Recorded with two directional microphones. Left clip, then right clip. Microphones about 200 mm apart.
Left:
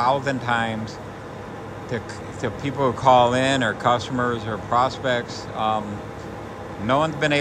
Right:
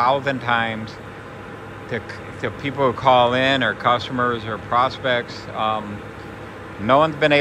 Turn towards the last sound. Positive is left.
turn(degrees=10)  # may be behind; listen again after turning